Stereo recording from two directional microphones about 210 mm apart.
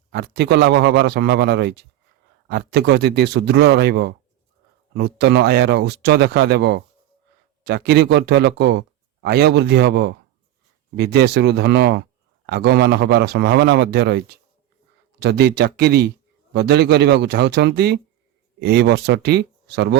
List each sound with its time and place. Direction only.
0.1 s a man's voice: 50° right (ahead or behind)